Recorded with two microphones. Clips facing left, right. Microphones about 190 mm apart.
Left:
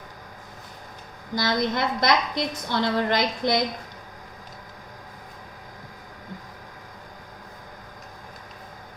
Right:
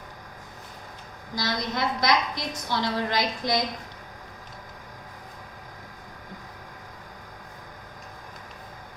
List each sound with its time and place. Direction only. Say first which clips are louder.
1.4 s a woman's voice: left 4 dB; 55° left (ahead or behind)